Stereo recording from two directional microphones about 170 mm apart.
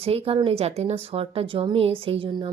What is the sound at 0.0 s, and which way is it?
Speech, 35° right (ahead or behind).